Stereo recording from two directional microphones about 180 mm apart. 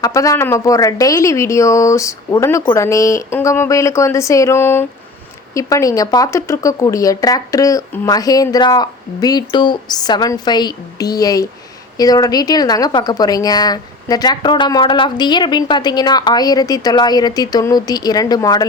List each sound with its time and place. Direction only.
0.0 s a woman's voice: 15° left (ahead or behind)